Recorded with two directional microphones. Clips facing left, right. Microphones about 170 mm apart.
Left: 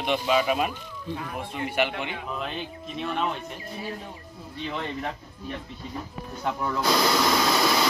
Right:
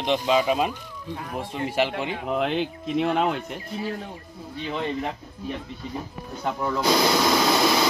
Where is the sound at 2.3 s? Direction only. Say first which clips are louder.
Right 8 dB; 90° right.